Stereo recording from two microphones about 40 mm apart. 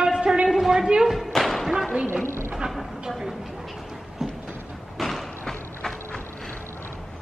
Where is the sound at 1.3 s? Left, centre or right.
Centre.